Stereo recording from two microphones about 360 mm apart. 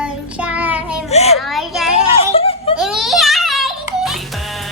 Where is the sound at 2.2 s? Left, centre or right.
Centre.